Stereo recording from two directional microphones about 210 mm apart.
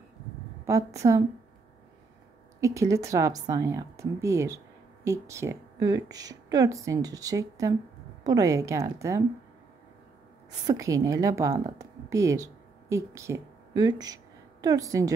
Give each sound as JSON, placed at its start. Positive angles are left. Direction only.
{"t": 0.7, "sound": "a woman's voice", "side_deg": -15}
{"t": 1.0, "sound": "speech", "side_deg": -30}
{"t": 2.6, "sound": "speech", "side_deg": -15}
{"t": 10.7, "sound": "a woman's voice", "side_deg": -15}